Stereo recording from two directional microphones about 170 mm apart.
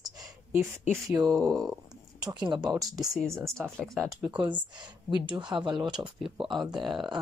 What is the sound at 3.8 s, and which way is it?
Speech, centre (ahead or behind).